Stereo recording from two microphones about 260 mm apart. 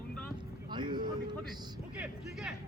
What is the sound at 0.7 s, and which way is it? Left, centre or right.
Boat, centre.